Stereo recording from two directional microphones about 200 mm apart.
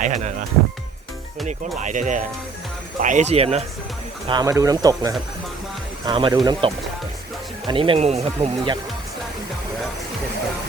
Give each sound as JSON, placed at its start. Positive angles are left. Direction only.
{"t": 0.0, "sound": "speech", "side_deg": -35}
{"t": 1.8, "sound": "speech", "side_deg": -40}
{"t": 4.3, "sound": "speech", "side_deg": -20}